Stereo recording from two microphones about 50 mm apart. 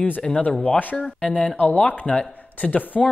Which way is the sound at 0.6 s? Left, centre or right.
Left.